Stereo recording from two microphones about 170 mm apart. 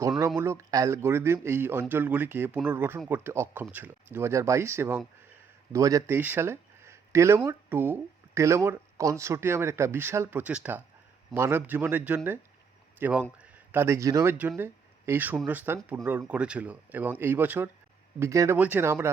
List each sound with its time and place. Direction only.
0.3 s speech: 15° right (ahead or behind)